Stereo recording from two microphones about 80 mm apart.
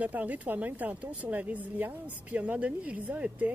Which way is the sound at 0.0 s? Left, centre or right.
Centre.